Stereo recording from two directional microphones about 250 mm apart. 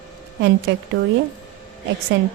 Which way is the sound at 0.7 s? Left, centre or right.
Right.